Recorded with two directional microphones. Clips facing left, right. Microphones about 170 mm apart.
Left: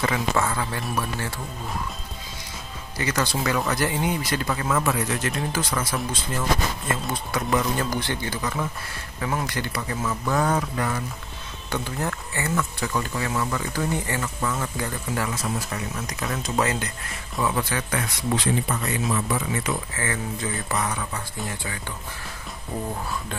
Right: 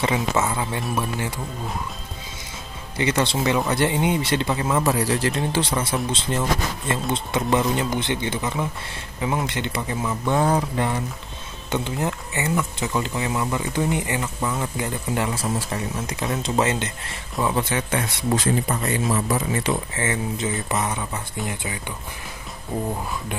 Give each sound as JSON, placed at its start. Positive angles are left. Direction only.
{"t": 0.0, "sound": "speech", "side_deg": -20}
{"t": 3.0, "sound": "speech", "side_deg": -25}
{"t": 18.3, "sound": "speech", "side_deg": -45}
{"t": 18.8, "sound": "speech", "side_deg": -25}